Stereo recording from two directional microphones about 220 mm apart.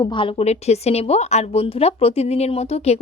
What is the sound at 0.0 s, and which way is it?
A woman's voice, 20° left (ahead or behind).